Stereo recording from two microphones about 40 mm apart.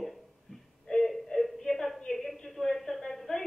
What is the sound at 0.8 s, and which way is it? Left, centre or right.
Whimper, centre.